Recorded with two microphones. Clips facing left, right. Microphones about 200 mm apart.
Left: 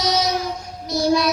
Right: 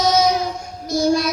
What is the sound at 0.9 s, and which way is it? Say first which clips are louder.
Child singing: right 1 dB; 50° right (ahead or behind).